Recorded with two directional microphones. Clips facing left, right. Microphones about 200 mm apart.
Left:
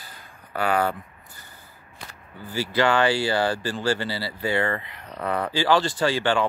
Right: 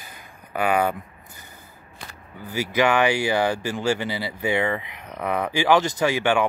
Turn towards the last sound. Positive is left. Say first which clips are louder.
# right 1 dB
turn(degrees=-15)  # may be behind; listen again after turning